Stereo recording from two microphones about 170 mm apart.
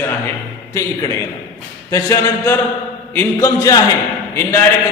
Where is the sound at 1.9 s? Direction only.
15° left (ahead or behind).